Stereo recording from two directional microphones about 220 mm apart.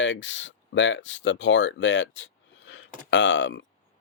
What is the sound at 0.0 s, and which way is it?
Speech, 55° left (ahead or behind).